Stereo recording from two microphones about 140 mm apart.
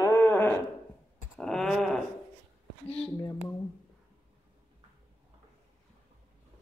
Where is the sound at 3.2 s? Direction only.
20° left (ahead or behind).